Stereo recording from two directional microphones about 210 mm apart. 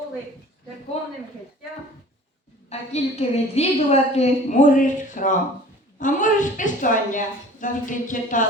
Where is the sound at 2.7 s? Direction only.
30° left (ahead or behind).